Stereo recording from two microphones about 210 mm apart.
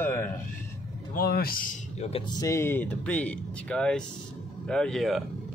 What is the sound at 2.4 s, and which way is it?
Speech, 10° left (ahead or behind).